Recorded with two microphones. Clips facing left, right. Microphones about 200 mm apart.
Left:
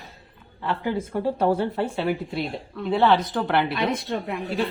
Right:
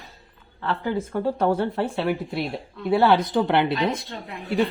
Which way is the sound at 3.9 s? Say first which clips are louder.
Left 4 dB; 60° left (ahead or behind).